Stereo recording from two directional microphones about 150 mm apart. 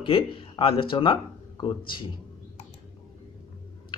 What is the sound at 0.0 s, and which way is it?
Speech, 35° left (ahead or behind).